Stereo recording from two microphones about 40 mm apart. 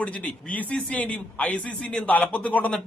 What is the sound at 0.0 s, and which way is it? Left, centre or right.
A man's voice, left.